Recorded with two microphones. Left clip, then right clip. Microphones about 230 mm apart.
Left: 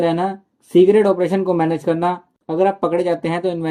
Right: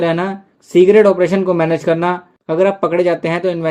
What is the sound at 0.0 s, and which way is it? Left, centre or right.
Speech, right.